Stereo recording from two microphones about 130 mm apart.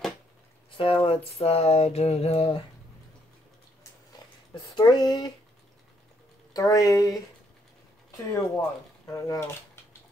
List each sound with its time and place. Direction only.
0.7 s a sound: 45° left (ahead or behind)
4.6 s speech: 35° left (ahead or behind)
6.5 s speech: 25° left (ahead or behind)
8.3 s speech: 25° left (ahead or behind)